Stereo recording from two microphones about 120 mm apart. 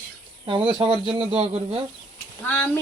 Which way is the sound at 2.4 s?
15° left (ahead or behind).